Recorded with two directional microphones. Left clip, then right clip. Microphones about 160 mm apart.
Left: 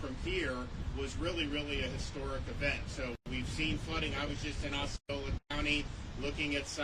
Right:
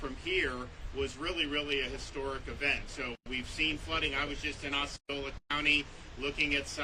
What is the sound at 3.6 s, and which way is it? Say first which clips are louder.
Speech: right 5 dB; 40° right (ahead or behind).